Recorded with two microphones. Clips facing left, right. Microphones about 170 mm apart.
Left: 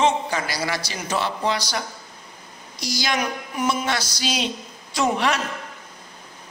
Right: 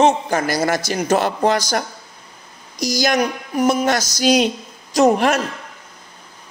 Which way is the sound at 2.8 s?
45° right (ahead or behind).